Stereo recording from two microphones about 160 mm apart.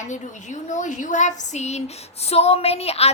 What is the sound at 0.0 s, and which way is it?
A woman's voice, 50° left (ahead or behind).